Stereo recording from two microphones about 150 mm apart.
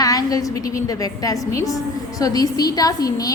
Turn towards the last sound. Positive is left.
turn(degrees=25)  # may be behind; listen again after turning